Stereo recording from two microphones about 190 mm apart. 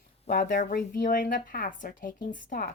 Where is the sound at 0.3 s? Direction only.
45° left (ahead or behind).